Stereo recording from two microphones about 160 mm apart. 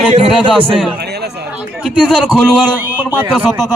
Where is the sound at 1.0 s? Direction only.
90° right.